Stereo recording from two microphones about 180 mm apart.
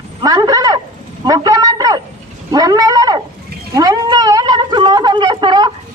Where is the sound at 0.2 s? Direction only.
20° right (ahead or behind).